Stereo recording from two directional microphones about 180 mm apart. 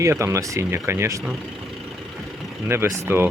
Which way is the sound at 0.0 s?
15° right (ahead or behind).